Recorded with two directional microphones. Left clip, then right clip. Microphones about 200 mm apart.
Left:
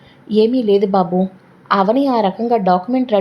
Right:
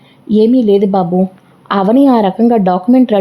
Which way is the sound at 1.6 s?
35° right (ahead or behind).